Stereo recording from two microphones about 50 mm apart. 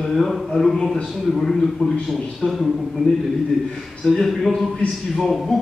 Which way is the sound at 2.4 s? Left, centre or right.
Left.